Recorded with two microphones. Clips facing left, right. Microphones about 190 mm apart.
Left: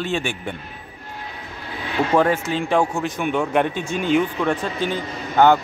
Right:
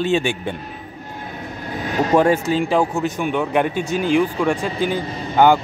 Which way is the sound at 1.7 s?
45° right (ahead or behind).